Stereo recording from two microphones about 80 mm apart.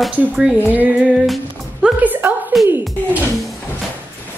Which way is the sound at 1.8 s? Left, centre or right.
Right.